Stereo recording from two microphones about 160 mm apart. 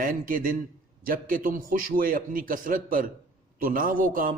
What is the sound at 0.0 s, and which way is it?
A man's voice, 60° right (ahead or behind).